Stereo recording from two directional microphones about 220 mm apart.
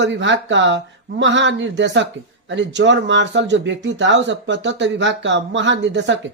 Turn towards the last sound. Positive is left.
turn(degrees=-55)  # may be behind; listen again after turning